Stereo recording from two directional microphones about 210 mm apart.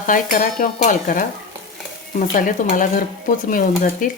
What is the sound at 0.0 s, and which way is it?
Stir, 40° left (ahead or behind).